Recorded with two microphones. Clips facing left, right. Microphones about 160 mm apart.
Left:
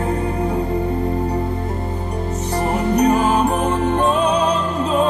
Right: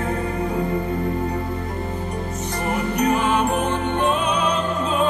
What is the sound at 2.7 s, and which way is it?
Music, 35° left (ahead or behind).